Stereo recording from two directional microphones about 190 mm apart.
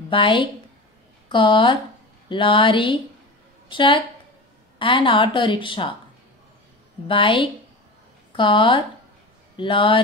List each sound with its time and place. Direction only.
0.1 s a woman's voice: 25° left (ahead or behind)
7.1 s a woman's voice: 25° left (ahead or behind)